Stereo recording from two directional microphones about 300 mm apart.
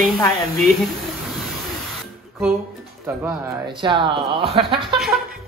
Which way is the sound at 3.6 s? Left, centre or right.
Centre.